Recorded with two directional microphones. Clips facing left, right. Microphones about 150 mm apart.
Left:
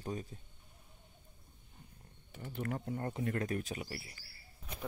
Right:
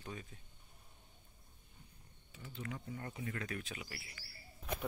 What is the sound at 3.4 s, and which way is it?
Speech, 40° left (ahead or behind).